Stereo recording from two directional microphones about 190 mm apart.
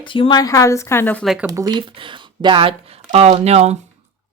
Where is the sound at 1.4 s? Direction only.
20° right (ahead or behind); by 3.7 s 35° right (ahead or behind).